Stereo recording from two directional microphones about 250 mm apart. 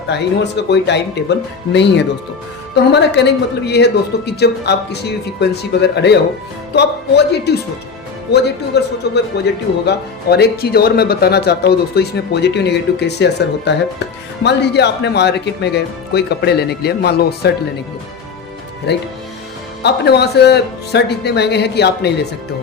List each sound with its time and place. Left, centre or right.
0.1 s speech: left
18.9 s speech: left